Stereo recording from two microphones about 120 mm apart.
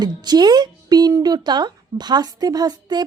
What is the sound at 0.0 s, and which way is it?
Speech, 35° right (ahead or behind).